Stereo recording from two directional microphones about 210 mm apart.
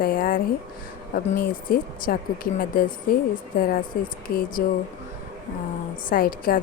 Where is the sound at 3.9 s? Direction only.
45° left (ahead or behind).